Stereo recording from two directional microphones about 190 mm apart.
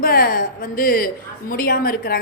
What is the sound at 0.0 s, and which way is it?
A woman's voice, 50° left (ahead or behind).